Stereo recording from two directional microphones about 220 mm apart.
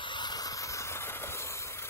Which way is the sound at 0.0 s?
20° left (ahead or behind).